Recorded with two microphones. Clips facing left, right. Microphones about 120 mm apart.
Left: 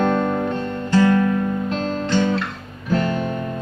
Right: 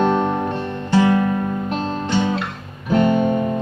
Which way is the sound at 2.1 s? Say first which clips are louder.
Left 1 dB; 15° right (ahead or behind).